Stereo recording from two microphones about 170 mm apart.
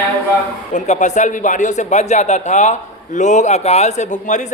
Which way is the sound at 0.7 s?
45° left (ahead or behind).